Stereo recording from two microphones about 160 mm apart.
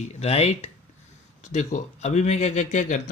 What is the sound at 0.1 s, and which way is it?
Speech, 40° left (ahead or behind).